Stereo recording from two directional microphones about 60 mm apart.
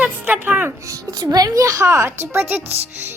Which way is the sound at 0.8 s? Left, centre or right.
Right.